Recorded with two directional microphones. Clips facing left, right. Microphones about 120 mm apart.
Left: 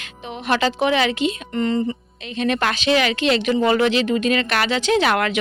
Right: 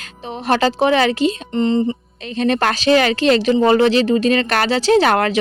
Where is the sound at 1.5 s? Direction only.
25° right (ahead or behind).